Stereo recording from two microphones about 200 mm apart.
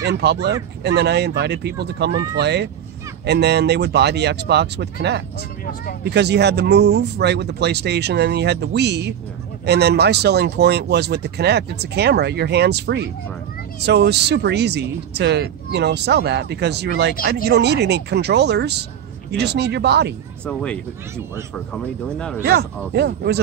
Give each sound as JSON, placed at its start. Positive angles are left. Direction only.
{"t": 0.1, "sound": "speech", "side_deg": -55}
{"t": 20.4, "sound": "speech", "side_deg": 5}
{"t": 22.4, "sound": "speech", "side_deg": -55}